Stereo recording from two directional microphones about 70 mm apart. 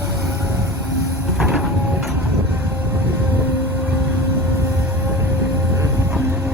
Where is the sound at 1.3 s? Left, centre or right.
Centre.